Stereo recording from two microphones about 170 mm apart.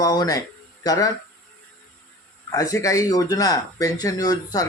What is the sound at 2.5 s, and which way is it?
Speech, 20° left (ahead or behind).